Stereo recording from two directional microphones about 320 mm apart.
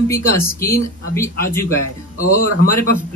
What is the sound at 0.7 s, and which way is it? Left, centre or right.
Speech, centre.